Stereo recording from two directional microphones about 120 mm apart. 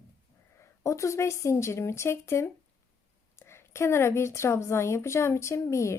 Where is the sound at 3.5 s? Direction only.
20° left (ahead or behind).